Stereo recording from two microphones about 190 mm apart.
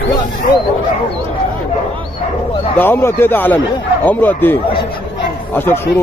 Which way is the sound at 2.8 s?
10° left (ahead or behind).